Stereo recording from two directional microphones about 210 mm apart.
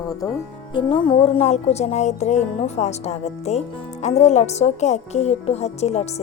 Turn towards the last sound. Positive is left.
turn(degrees=30)  # may be behind; listen again after turning